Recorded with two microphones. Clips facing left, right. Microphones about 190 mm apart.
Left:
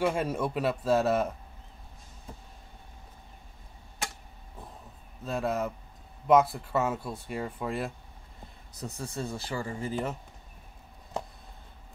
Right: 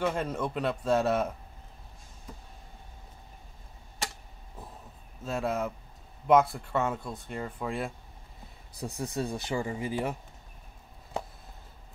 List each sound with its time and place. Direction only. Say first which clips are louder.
0.0 s speech: left 2 dB; 10° left (ahead or behind)
5.2 s speech: left 1 dB; centre (ahead or behind)
8.7 s speech: right 3 dB; 15° right (ahead or behind)